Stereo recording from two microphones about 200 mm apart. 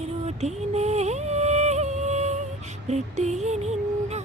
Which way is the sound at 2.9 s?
35° right (ahead or behind).